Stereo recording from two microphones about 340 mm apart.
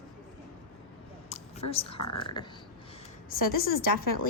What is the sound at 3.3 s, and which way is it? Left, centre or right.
Speech, left.